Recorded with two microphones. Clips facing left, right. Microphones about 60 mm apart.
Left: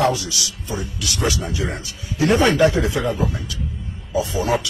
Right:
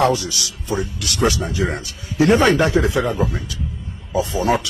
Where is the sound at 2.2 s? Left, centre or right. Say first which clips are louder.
Right 1 dB; right.